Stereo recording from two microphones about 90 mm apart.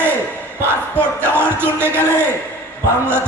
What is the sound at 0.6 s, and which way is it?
Speech, 25° right (ahead or behind).